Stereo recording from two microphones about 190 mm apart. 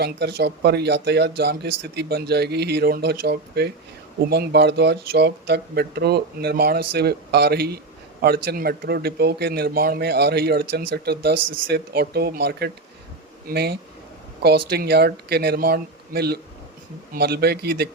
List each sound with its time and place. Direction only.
0.0 s speech: 60° right (ahead or behind)